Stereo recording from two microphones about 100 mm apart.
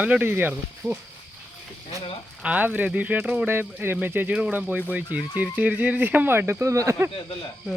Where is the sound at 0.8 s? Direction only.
5° left (ahead or behind).